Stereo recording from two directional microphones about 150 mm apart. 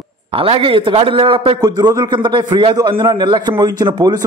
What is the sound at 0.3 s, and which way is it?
A man's voice, 35° right (ahead or behind).